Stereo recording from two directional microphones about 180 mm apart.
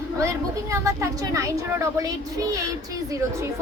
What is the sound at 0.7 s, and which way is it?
A woman's voice, 15° right (ahead or behind).